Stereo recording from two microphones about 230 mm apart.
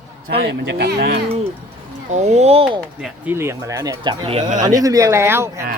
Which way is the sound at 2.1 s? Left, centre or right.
Right.